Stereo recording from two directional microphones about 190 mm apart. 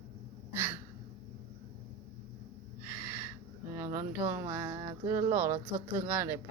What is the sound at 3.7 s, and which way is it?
Speech, 15° right (ahead or behind).